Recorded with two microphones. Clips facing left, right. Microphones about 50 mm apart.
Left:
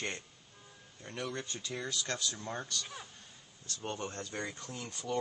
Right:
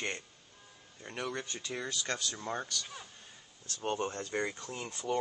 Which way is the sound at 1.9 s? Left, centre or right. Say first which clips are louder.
Right 1 dB; right.